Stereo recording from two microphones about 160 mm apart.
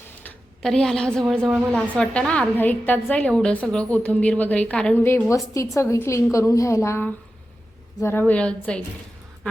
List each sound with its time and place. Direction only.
0.2 s a woman's voice: 5° left (ahead or behind)